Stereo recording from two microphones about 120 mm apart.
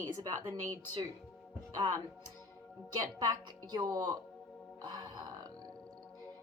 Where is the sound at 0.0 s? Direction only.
30° right (ahead or behind).